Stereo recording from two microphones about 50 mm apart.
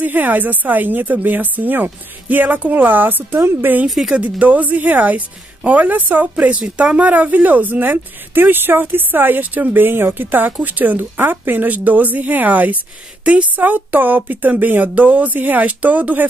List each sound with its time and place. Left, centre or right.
0.0 s speech: right
3.8 s speech: centre
4.2 s speech: right